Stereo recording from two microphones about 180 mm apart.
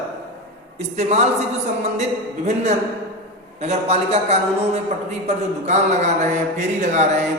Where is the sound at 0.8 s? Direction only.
40° right (ahead or behind).